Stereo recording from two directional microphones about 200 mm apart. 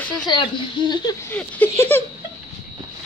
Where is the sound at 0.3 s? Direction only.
25° left (ahead or behind).